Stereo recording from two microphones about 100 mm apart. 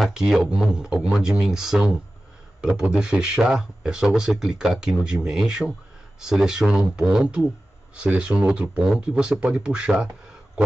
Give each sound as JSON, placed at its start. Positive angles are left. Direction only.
{"t": 0.0, "sound": "speech", "side_deg": -5}